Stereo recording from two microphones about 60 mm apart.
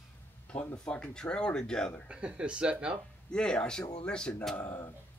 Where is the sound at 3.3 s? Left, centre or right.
Centre.